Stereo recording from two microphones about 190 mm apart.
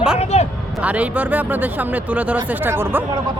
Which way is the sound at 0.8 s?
5° right (ahead or behind).